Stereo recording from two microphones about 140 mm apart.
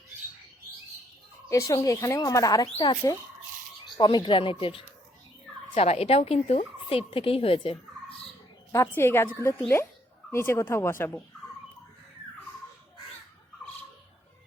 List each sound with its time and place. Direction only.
1.5 s speech: 25° left (ahead or behind); by 4.9 s 40° left (ahead or behind)
5.7 s turkey: 45° left (ahead or behind)
8.7 s speech: 20° left (ahead or behind)